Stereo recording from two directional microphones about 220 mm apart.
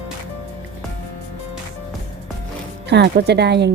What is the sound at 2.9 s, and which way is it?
Speech, 50° right (ahead or behind).